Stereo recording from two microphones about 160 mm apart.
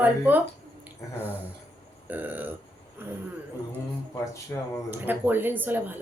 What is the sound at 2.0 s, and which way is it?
A woman's voice, 10° right (ahead or behind).